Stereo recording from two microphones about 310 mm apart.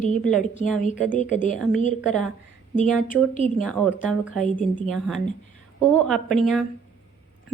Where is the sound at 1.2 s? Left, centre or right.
Left.